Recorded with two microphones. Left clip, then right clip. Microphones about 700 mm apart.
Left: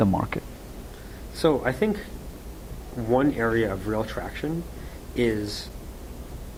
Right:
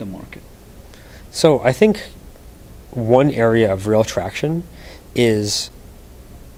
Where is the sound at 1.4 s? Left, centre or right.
Right.